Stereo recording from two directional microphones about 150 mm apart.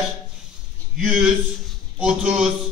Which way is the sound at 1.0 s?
5° right (ahead or behind).